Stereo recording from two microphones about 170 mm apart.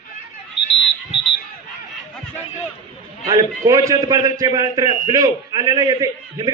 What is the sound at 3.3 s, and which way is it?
A man's voice, 20° right (ahead or behind).